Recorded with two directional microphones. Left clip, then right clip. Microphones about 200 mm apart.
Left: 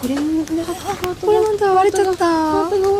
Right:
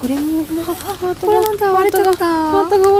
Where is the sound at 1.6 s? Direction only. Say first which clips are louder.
Right 1 dB; centre (ahead or behind).